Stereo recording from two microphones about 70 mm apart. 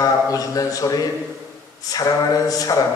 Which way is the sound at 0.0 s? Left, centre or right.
Left.